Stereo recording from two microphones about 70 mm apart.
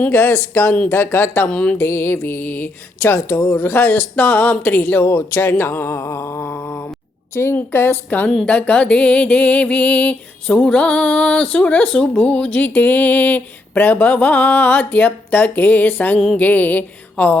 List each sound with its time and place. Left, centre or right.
0.1 s speech: left
1.5 s music: centre
1.8 s speech: left
7.5 s music: left